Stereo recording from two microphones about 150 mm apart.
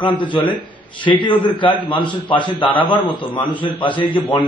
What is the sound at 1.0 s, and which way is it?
A man's voice, 30° left (ahead or behind).